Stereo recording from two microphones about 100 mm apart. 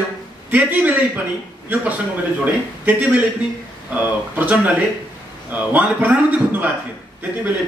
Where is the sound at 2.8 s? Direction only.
15° right (ahead or behind).